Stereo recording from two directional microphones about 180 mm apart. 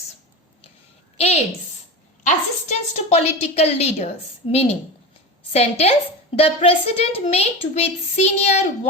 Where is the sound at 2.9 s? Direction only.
35° left (ahead or behind).